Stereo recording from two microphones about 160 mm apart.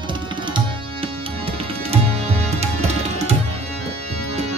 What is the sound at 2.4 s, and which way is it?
Tabla, 40° right (ahead or behind).